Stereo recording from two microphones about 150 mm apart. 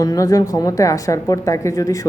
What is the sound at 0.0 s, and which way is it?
A woman's voice, 25° left (ahead or behind).